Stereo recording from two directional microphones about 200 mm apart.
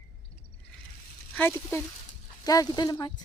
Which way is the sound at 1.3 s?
10° left (ahead or behind).